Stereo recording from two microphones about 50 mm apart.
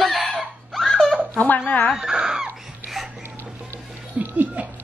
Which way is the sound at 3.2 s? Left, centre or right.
Right.